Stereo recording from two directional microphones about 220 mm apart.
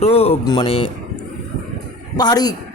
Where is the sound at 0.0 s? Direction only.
25° left (ahead or behind).